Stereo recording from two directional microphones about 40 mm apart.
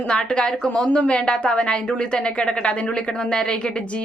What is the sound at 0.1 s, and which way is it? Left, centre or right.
A woman's voice, left.